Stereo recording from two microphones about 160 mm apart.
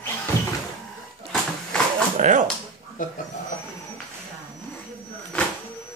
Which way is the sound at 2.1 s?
50° right (ahead or behind).